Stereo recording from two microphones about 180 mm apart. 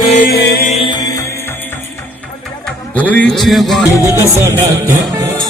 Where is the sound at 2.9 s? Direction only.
10° left (ahead or behind).